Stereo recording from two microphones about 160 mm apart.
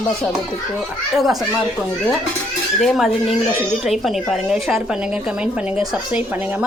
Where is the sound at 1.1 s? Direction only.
Centre (ahead or behind).